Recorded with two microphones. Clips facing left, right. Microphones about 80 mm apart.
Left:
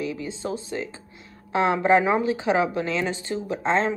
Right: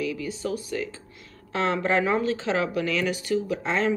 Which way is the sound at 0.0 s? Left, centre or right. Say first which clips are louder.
Even; left.